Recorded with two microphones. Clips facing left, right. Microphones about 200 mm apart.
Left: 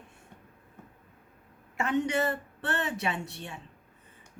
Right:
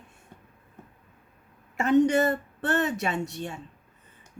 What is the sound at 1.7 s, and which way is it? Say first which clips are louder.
Speech: right 8 dB; 40° right (ahead or behind).